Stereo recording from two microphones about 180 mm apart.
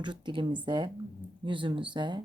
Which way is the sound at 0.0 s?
25° right (ahead or behind).